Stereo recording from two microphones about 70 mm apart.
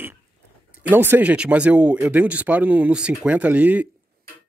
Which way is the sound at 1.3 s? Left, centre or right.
Centre.